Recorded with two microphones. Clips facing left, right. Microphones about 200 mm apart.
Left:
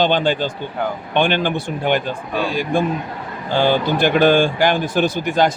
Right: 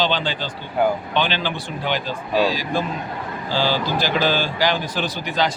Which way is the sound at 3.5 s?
55° left (ahead or behind).